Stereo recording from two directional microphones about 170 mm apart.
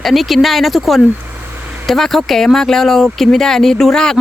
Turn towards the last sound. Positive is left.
turn(degrees=5)  # may be behind; listen again after turning